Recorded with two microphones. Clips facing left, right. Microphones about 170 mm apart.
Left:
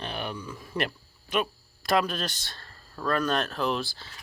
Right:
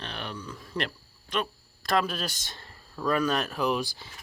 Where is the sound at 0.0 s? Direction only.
10° left (ahead or behind).